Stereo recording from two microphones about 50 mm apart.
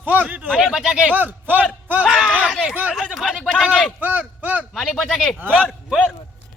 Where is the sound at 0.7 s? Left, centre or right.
Centre.